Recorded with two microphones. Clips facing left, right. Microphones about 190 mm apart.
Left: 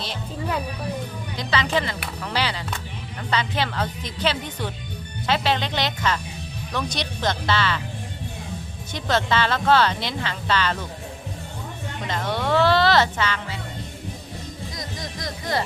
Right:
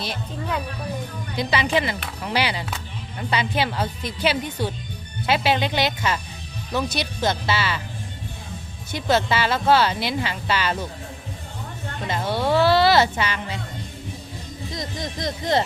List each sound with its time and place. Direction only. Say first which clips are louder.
1.4 s speech: right 2 dB; 10° right (ahead or behind)
8.9 s speech: right 2 dB; 10° right (ahead or behind)
12.0 s speech: right 2 dB; 10° right (ahead or behind)
14.7 s speech: right 7 dB; 25° right (ahead or behind)